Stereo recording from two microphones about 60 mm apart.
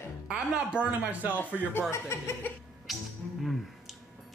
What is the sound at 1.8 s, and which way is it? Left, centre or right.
Speech, left.